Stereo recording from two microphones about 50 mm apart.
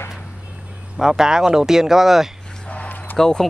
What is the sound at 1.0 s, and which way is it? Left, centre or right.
Speech, centre.